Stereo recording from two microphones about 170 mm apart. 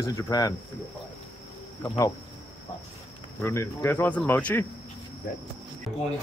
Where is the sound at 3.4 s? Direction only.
15° left (ahead or behind).